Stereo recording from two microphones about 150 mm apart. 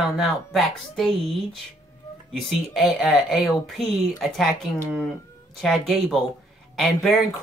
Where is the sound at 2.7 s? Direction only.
Centre (ahead or behind).